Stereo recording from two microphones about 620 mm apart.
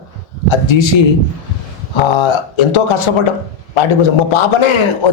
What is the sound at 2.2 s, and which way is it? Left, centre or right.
A man's voice, left.